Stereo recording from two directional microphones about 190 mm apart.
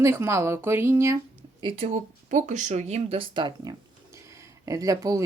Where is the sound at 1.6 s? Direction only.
30° right (ahead or behind).